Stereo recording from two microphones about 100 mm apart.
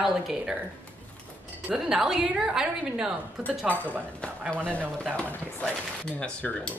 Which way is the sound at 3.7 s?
15° left (ahead or behind).